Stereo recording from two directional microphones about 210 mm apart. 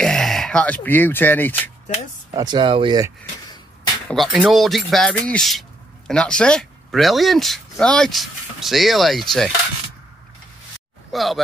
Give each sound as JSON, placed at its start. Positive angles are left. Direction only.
{"t": 0.0, "sound": "speech", "side_deg": 0}
{"t": 2.3, "sound": "speech", "side_deg": -20}
{"t": 4.1, "sound": "speech", "side_deg": 0}
{"t": 11.1, "sound": "speech", "side_deg": 0}